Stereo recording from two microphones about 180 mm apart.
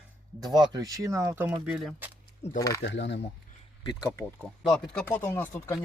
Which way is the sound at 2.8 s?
75° left (ahead or behind).